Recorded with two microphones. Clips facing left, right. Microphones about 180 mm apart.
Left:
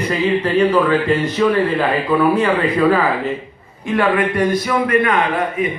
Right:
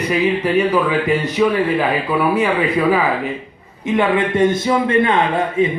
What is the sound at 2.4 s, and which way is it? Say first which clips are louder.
Speech: left 1 dB; 10° right (ahead or behind).